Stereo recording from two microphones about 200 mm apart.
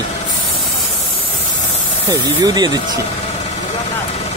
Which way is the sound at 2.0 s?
20° right (ahead or behind).